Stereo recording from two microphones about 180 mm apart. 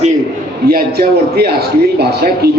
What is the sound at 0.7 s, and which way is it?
A man's voice, 60° right (ahead or behind).